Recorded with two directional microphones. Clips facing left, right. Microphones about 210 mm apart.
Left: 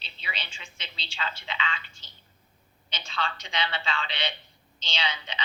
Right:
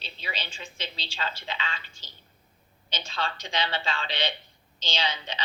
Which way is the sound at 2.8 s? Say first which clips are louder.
Right 1 dB; 40° right (ahead or behind).